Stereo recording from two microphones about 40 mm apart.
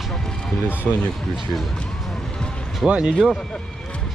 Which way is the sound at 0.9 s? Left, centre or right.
Left.